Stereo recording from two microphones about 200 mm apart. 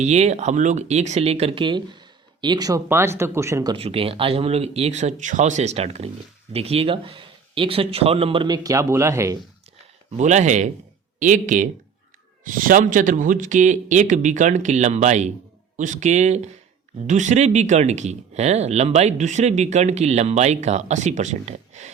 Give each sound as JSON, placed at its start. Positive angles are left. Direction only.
{"t": 0.0, "sound": "speech", "side_deg": -35}
{"t": 10.2, "sound": "speech", "side_deg": -35}